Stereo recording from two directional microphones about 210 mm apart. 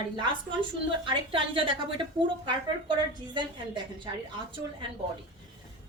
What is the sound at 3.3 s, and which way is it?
Speech, 20° right (ahead or behind).